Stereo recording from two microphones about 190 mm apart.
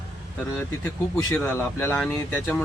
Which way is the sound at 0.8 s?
10° left (ahead or behind).